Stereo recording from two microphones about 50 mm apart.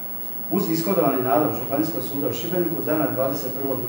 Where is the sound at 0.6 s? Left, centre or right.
Centre.